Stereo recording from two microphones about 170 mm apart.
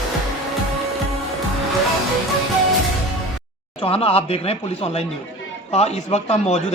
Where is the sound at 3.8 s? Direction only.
35° left (ahead or behind).